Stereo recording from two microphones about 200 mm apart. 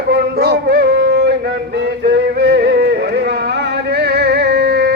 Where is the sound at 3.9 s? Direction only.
55° right (ahead or behind).